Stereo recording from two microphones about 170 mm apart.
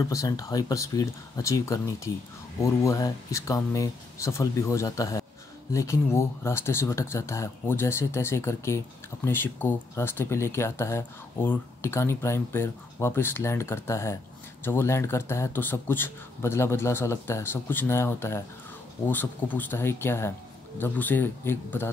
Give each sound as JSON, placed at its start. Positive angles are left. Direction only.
{"t": 0.0, "sound": "speech", "side_deg": 20}